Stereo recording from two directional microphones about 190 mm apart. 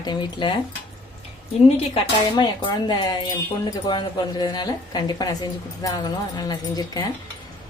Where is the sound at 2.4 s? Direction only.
25° left (ahead or behind).